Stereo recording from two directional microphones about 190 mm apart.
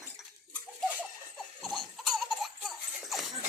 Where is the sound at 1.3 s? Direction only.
Centre (ahead or behind).